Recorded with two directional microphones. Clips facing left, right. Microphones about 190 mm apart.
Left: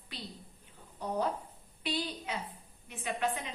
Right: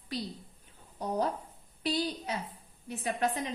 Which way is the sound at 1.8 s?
40° right (ahead or behind).